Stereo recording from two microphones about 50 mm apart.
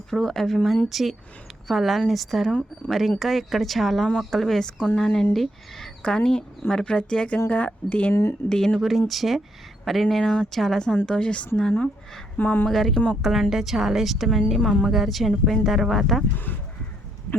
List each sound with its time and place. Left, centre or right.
0.1 s a woman's voice: centre
7.5 s speech: left
8.1 s speech: left
8.4 s speech: centre
8.8 s a woman's voice: centre
11.0 s speech: left
12.4 s speech: left
12.6 s a woman's voice: centre
14.8 s a woman's voice: centre